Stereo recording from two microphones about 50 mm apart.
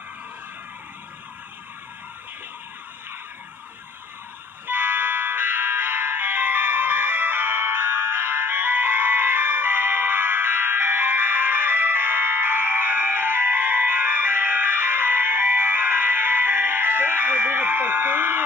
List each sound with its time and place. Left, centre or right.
4.6 s music: right